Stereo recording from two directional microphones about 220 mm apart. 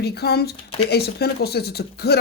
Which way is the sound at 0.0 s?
45° left (ahead or behind).